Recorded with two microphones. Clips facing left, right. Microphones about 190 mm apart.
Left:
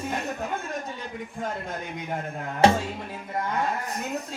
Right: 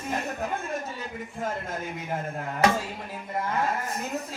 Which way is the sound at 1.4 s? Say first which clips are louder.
Right 1 dB; 5° right (ahead or behind).